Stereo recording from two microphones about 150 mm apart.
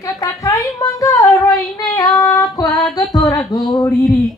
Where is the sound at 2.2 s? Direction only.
25° left (ahead or behind).